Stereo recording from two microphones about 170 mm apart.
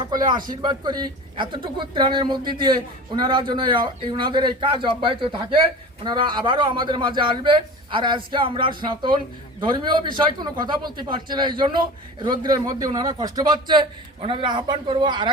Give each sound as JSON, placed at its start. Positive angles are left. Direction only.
{"t": 0.0, "sound": "speech", "side_deg": -25}